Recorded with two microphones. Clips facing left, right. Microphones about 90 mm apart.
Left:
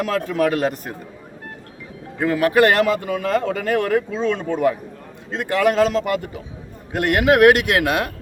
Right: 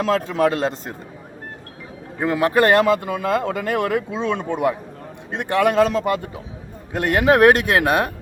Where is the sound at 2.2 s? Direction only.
25° right (ahead or behind).